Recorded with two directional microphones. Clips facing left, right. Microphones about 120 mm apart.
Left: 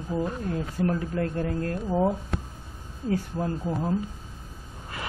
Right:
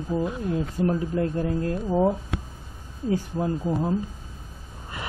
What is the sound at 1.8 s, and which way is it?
Speech, 10° right (ahead or behind).